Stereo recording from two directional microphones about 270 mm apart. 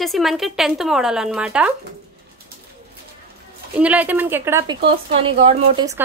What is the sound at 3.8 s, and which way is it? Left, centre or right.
A woman's voice, centre.